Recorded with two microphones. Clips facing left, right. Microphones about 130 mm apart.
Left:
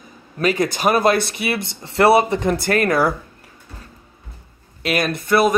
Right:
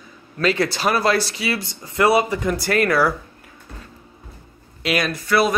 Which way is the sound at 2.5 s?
50° left (ahead or behind).